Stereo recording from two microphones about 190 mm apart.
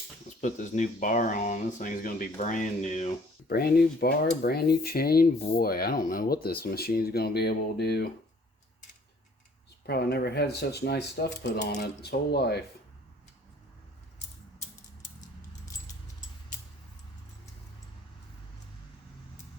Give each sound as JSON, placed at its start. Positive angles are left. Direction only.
{"t": 0.4, "sound": "speech", "side_deg": 40}
{"t": 3.5, "sound": "speech", "side_deg": 55}
{"t": 9.8, "sound": "speech", "side_deg": 55}